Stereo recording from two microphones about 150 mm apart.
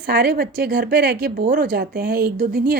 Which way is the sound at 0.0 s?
90° right.